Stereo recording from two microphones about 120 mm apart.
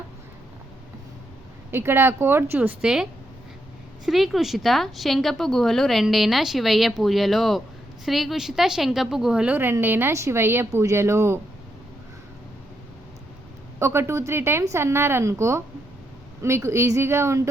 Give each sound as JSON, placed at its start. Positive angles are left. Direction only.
{"t": 1.7, "sound": "a woman's voice", "side_deg": -20}
{"t": 13.7, "sound": "a woman's voice", "side_deg": -20}